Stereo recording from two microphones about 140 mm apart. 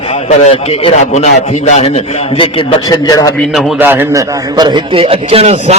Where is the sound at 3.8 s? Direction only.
15° right (ahead or behind).